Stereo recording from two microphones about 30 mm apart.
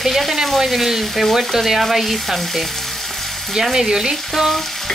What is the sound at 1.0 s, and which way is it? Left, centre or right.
Frying, centre.